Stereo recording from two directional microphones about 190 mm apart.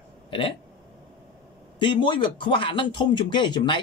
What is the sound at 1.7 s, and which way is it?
Speech, 25° left (ahead or behind).